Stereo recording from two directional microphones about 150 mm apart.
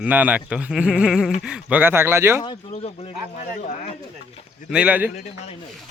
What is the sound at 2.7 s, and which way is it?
Speech, 45° left (ahead or behind).